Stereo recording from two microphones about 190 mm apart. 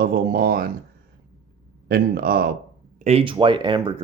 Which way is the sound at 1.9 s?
50° right (ahead or behind).